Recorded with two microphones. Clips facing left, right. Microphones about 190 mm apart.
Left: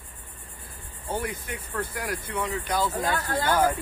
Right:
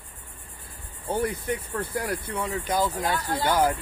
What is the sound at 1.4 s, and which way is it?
Speech, 35° right (ahead or behind).